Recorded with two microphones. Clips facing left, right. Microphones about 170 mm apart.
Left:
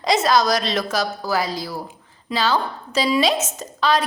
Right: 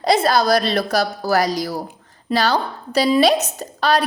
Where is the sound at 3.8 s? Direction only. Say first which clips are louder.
Right 2 dB; 65° right (ahead or behind).